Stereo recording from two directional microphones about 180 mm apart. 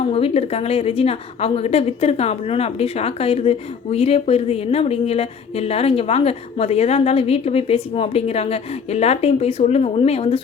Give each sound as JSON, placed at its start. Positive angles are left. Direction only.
{"t": 0.1, "sound": "a woman's voice", "side_deg": 35}